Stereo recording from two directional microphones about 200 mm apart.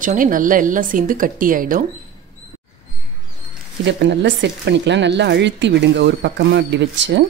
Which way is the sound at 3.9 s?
60° right (ahead or behind).